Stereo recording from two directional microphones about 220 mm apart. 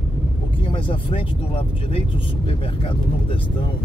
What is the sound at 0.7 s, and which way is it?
Speech, 25° left (ahead or behind).